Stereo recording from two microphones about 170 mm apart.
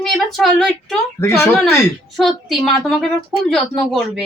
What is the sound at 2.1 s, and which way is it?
A woman's voice, centre (ahead or behind).